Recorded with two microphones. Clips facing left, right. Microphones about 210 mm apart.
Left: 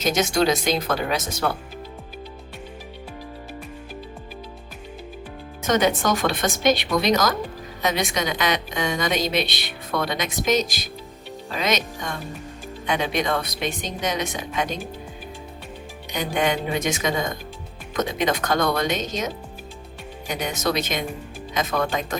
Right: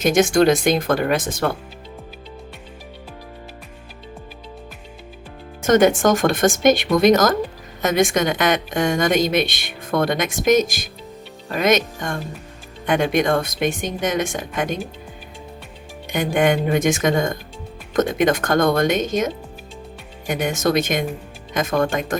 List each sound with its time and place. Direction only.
0.0 s a woman's voice: 50° right (ahead or behind)
5.6 s a woman's voice: 50° right (ahead or behind)
16.1 s a woman's voice: 50° right (ahead or behind)